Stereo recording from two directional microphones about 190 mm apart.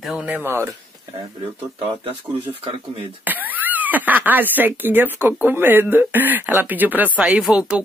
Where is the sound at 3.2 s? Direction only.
10° right (ahead or behind).